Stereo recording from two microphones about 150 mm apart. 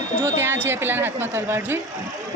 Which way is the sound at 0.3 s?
15° right (ahead or behind).